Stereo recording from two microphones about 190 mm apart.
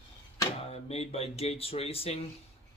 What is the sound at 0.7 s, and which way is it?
Speech, 35° left (ahead or behind).